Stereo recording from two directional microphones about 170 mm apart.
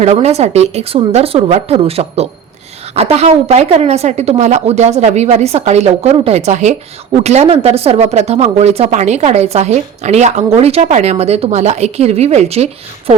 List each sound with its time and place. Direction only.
0.0 s a woman's voice: 40° right (ahead or behind)